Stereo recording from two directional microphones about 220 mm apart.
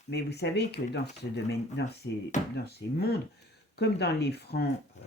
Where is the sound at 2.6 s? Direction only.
45° left (ahead or behind).